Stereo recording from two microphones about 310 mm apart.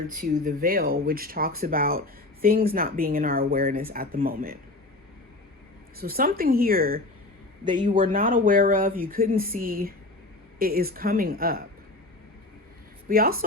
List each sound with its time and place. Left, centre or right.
0.1 s speech: right
6.0 s speech: right
7.6 s speech: centre
13.1 s speech: right